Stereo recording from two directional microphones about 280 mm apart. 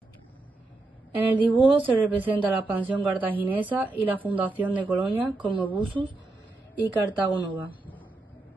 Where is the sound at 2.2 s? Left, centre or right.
Centre.